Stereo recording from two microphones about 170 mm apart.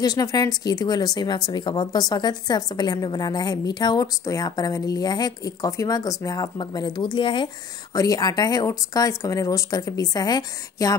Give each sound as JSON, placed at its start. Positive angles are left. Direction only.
{"t": 0.0, "sound": "speech", "side_deg": 20}